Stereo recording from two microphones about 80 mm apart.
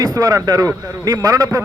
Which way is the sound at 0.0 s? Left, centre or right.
Right.